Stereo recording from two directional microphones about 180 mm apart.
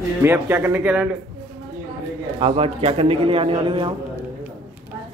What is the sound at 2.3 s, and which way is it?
A man's voice, 30° right (ahead or behind).